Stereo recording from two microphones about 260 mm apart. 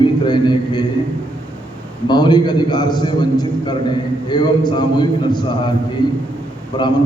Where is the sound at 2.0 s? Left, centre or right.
Centre.